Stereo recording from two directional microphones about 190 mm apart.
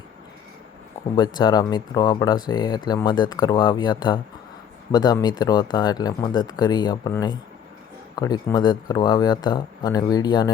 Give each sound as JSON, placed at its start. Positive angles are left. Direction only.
{"t": 1.1, "sound": "speech", "side_deg": 25}